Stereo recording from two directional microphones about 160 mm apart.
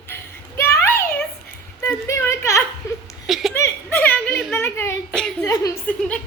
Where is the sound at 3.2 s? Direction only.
Centre (ahead or behind).